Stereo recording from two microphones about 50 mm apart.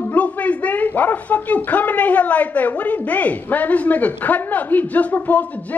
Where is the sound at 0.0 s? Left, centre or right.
Left.